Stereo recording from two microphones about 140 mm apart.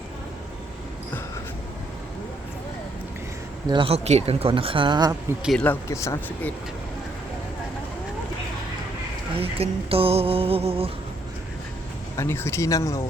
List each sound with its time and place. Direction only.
3.7 s speech: 40° right (ahead or behind)
5.4 s speech: centre (ahead or behind)
5.6 s speech: 20° left (ahead or behind)
9.4 s a sound: 45° right (ahead or behind)
12.1 s speech: 20° left (ahead or behind)